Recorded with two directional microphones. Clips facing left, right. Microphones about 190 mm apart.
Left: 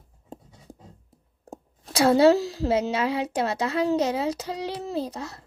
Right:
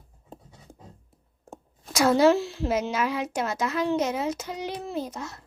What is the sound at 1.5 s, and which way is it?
A woman's voice, 30° left (ahead or behind).